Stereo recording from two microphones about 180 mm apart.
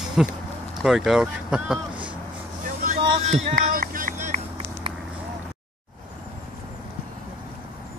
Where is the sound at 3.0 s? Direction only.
40° right (ahead or behind).